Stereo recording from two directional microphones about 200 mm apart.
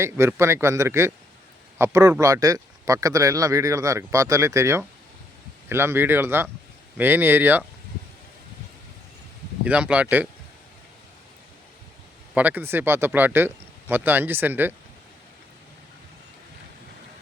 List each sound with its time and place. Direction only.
0.0 s speech: 15° right (ahead or behind)
9.6 s speech: 5° right (ahead or behind)
12.3 s speech: 10° right (ahead or behind)